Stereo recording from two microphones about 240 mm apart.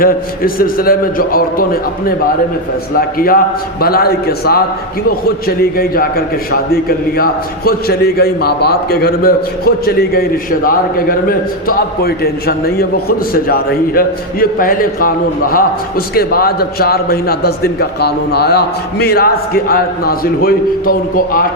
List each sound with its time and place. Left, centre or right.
0.0 s a man's voice: left